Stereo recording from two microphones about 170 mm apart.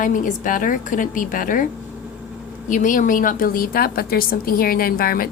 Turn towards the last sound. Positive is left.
turn(degrees=60)  # may be behind; listen again after turning